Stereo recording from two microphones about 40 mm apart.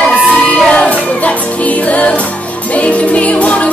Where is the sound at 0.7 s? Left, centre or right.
Left.